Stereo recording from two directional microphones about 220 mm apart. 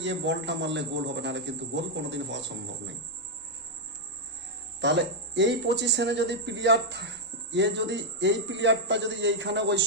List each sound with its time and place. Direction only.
0.0 s a man's voice: 55° right (ahead or behind)
4.8 s speech: 55° right (ahead or behind)